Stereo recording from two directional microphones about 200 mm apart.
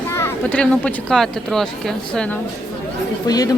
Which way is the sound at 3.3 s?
20° left (ahead or behind).